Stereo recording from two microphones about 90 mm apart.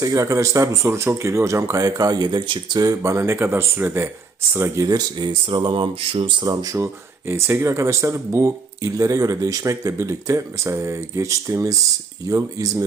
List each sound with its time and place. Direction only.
0.0 s speech: 40° right (ahead or behind); by 5.5 s 60° right (ahead or behind)
5.6 s speech: 70° right (ahead or behind)
6.4 s speech: 45° right (ahead or behind)
6.7 s speech: 30° right (ahead or behind)